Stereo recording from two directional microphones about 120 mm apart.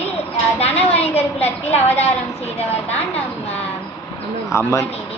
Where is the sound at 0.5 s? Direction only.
60° left (ahead or behind).